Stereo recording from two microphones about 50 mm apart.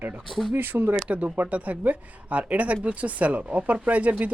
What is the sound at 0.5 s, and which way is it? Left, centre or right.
Speech, right.